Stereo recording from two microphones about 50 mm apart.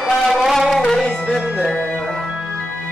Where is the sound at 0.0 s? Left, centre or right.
Centre.